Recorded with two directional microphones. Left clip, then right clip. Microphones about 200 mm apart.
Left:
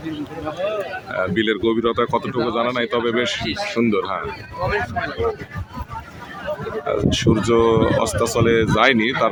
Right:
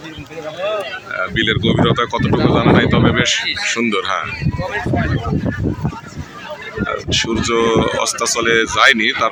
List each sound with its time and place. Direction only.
1.1 s speech: 15° left (ahead or behind)
6.8 s speech: 15° left (ahead or behind)